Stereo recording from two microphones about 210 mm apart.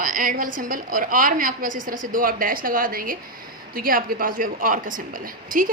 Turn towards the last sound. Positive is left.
turn(degrees=-40)  # may be behind; listen again after turning